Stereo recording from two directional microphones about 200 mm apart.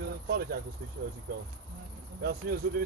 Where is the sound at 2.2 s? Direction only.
50° right (ahead or behind).